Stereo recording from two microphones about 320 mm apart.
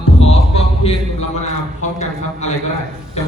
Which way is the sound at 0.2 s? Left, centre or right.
Centre.